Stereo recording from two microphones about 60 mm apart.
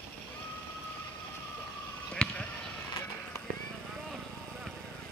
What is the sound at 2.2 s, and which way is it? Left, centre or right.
Basketball bounce, centre.